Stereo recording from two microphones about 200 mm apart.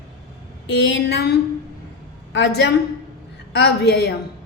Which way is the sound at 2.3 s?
60° left (ahead or behind).